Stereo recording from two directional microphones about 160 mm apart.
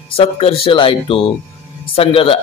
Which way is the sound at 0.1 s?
35° left (ahead or behind).